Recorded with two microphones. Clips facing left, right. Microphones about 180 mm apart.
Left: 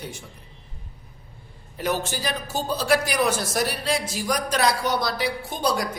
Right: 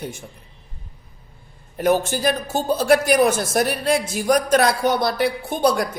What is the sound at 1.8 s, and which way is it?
Speech, 50° right (ahead or behind).